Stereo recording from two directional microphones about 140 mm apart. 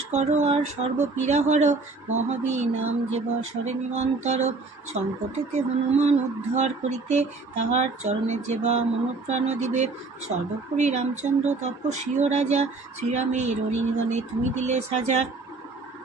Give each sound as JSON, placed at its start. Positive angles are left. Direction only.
{"t": 0.1, "sound": "speech", "side_deg": -55}